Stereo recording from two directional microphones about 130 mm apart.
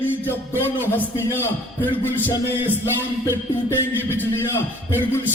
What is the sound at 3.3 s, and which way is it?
Music, 20° left (ahead or behind).